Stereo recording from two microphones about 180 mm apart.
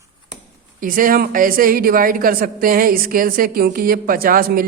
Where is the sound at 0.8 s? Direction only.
50° right (ahead or behind).